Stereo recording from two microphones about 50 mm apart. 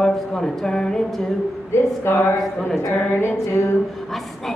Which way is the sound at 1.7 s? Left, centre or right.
Left.